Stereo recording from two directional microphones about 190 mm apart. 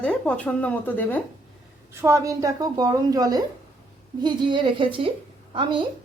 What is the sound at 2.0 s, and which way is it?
A woman's voice, 15° right (ahead or behind).